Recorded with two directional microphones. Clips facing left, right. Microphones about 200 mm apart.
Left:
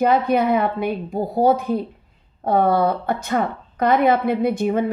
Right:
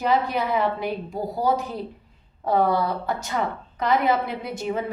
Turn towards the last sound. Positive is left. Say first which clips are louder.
# left 8 dB
turn(degrees=55)  # may be behind; listen again after turning